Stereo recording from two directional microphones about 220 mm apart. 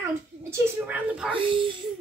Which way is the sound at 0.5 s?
10° right (ahead or behind).